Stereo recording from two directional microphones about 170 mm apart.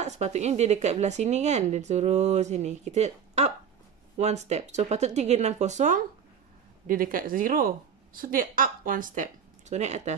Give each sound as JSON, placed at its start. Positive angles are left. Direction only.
{"t": 0.0, "sound": "speech", "side_deg": -40}